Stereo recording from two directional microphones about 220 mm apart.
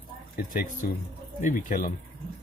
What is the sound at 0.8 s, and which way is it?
Speech, 40° left (ahead or behind).